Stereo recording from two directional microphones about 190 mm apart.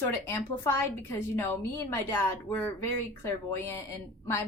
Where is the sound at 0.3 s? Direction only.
15° left (ahead or behind).